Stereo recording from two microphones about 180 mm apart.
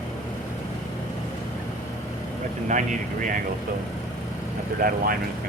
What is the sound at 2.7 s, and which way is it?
Speech, 45° right (ahead or behind).